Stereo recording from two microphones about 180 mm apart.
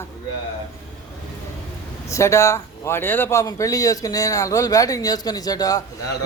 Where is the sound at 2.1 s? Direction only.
15° left (ahead or behind).